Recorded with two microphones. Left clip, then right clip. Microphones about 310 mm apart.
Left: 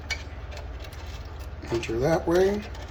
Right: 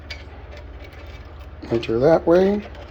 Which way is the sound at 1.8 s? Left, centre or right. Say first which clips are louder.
Right 9 dB; right.